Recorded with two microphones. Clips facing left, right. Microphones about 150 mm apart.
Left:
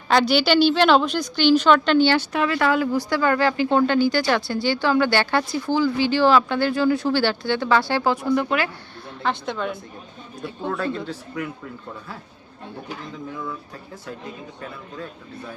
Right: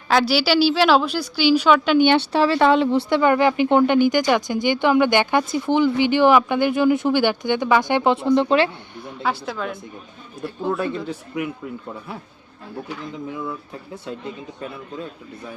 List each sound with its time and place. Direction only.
0.1 s a woman's voice: 5° right (ahead or behind)
2.0 s speech: 30° right (ahead or behind)
9.0 s a woman's voice: 10° right (ahead or behind)
11.0 s a woman's voice: 15° right (ahead or behind)